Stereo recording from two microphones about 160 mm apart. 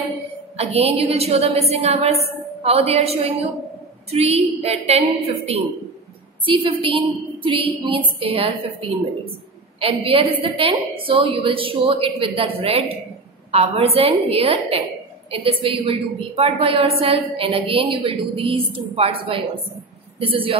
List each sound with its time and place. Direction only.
0.6 s a woman's voice: 40° right (ahead or behind)
9.8 s a woman's voice: 35° right (ahead or behind)